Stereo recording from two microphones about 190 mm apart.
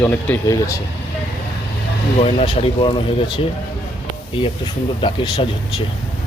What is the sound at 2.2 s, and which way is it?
Speech, 30° left (ahead or behind).